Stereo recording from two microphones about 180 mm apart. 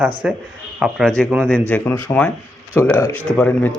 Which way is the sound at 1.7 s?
10° left (ahead or behind).